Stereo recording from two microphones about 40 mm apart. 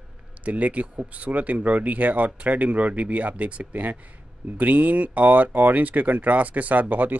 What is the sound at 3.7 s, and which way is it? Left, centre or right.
Speech, right.